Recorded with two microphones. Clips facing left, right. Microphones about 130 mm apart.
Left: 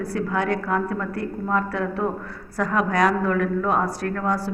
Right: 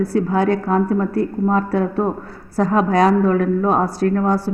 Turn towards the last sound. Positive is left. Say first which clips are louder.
# right 7 dB
turn(degrees=-30)  # may be behind; listen again after turning